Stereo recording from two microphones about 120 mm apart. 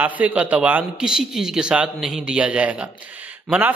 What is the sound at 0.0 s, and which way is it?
A man's voice, 15° right (ahead or behind).